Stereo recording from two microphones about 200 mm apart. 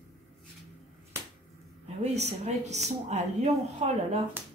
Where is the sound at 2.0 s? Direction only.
30° right (ahead or behind).